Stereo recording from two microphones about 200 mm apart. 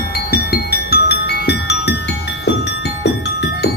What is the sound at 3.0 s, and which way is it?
Music, 55° left (ahead or behind).